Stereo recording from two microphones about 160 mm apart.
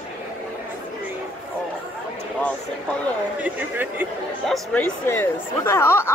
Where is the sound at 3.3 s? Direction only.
10° right (ahead or behind).